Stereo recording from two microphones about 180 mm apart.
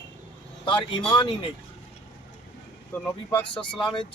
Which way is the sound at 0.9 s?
25° left (ahead or behind).